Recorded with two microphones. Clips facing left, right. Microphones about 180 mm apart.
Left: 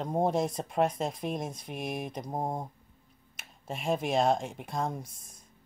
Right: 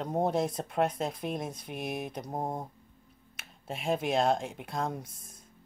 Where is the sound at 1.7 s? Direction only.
50° left (ahead or behind).